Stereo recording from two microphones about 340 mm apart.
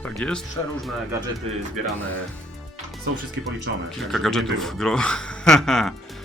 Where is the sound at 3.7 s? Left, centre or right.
Right.